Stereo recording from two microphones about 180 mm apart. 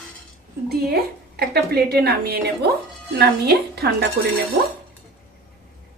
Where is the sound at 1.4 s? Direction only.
60° right (ahead or behind).